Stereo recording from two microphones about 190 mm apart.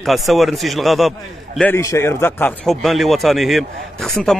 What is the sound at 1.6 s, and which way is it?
Speech, 15° left (ahead or behind).